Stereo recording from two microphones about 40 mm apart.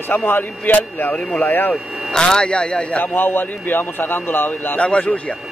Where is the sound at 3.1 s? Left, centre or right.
Left.